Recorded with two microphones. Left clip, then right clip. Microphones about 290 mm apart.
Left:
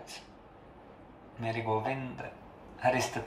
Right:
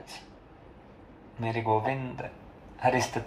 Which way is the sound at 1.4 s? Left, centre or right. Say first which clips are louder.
Right 5 dB; centre.